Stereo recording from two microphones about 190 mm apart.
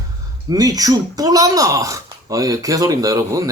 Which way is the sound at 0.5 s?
20° right (ahead or behind).